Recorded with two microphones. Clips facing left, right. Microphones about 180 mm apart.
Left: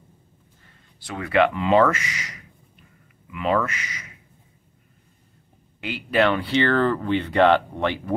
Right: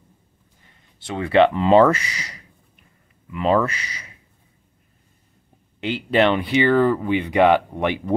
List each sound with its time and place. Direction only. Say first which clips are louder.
0.9 s speech: right 4 dB; 25° right (ahead or behind)
5.8 s speech: right 3 dB; 25° right (ahead or behind)